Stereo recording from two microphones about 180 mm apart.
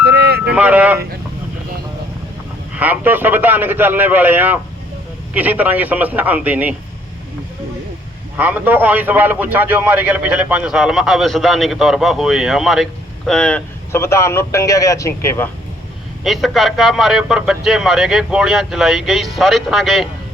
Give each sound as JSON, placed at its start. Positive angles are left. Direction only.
{"t": 0.0, "sound": "a sound", "side_deg": -65}
{"t": 0.4, "sound": "speech", "side_deg": -5}
{"t": 2.7, "sound": "a man's voice", "side_deg": -10}
{"t": 8.4, "sound": "a man's voice", "side_deg": -10}
{"t": 16.2, "sound": "a man's voice", "side_deg": 0}